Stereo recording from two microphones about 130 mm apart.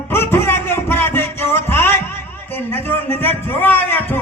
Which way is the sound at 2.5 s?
15° left (ahead or behind).